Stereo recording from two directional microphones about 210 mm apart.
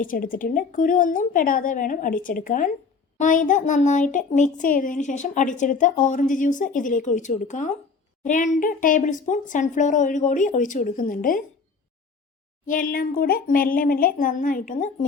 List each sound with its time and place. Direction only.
0.0 s speech: 40° left (ahead or behind)
12.6 s speech: 40° left (ahead or behind)